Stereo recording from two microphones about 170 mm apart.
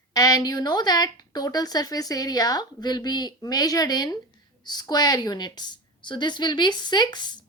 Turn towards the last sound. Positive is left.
turn(degrees=25)  # may be behind; listen again after turning